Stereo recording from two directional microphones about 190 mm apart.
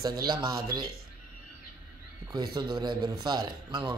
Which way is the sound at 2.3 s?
25° right (ahead or behind).